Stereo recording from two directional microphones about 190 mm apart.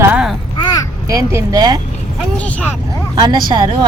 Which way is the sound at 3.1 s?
20° right (ahead or behind).